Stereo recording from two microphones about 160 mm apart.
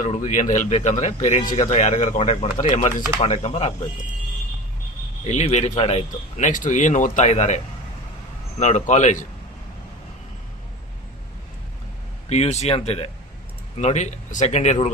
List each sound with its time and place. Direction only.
0.0 s speech: 50° left (ahead or behind)
5.2 s speech: 45° left (ahead or behind)
12.3 s speech: 45° left (ahead or behind)